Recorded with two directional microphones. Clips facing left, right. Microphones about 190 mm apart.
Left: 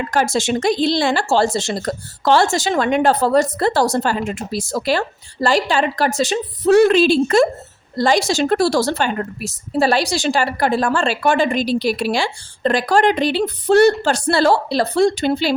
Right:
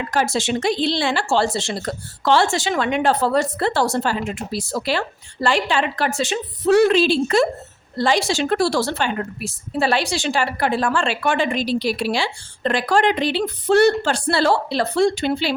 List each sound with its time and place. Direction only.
0.1 s a woman's voice: 45° left (ahead or behind)